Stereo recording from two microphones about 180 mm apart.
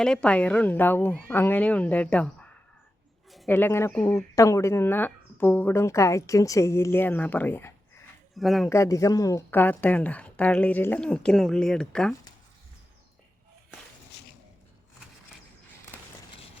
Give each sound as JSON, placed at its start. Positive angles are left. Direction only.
{"t": 0.0, "sound": "speech", "side_deg": 5}
{"t": 3.2, "sound": "a sound", "side_deg": 0}
{"t": 3.5, "sound": "speech", "side_deg": 15}
{"t": 8.4, "sound": "speech", "side_deg": 0}
{"t": 8.7, "sound": "speech", "side_deg": 15}
{"t": 14.1, "sound": "a sound", "side_deg": 70}